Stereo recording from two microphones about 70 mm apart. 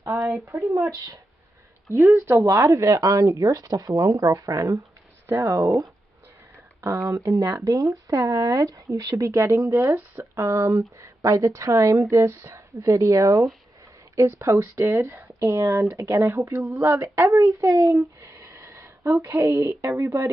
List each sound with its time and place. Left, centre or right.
0.2 s speech: right
5.2 s speech: right
7.1 s speech: right
18.2 s a sound: right
19.2 s speech: right